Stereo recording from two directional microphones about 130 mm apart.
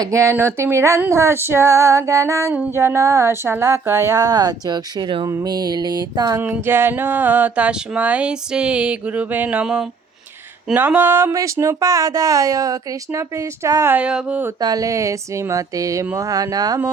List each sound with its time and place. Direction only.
0.0 s speech: 25° right (ahead or behind)
5.3 s music: 30° right (ahead or behind)
6.4 s a sound: 15° right (ahead or behind)
10.8 s speech: 15° right (ahead or behind)
13.9 s a sound: 10° right (ahead or behind)
14.6 s speech: 30° right (ahead or behind)